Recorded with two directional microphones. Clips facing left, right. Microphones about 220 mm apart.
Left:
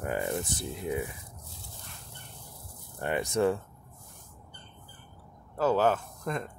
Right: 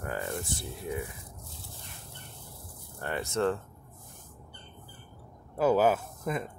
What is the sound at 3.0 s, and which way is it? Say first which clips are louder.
Speech: left 3 dB; 15° left (ahead or behind).